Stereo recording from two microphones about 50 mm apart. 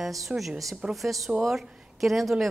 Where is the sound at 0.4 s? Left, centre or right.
Centre.